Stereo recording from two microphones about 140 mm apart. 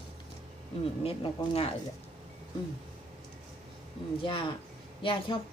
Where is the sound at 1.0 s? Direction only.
45° left (ahead or behind).